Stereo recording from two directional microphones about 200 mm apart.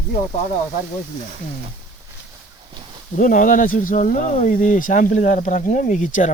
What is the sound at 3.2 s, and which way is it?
Speech, 40° left (ahead or behind).